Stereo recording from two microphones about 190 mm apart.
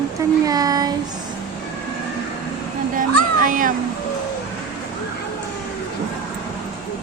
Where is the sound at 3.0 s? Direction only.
45° right (ahead or behind).